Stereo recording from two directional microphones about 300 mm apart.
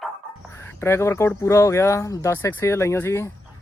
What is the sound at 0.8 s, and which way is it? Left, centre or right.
Speech, centre.